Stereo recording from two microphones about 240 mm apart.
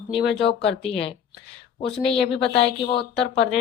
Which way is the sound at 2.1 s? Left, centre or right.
Centre.